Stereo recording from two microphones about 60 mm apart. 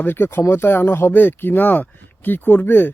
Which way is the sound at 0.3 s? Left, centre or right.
Left.